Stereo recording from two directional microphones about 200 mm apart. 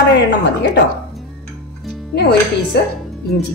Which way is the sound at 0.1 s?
60° left (ahead or behind).